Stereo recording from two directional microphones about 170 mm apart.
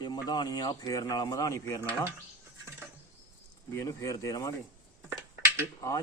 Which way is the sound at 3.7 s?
20° left (ahead or behind).